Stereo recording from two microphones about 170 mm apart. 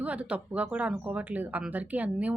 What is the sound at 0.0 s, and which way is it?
Speech, 10° right (ahead or behind).